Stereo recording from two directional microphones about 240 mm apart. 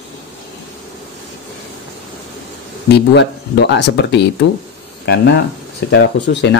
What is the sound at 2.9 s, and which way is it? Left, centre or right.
Speech, left.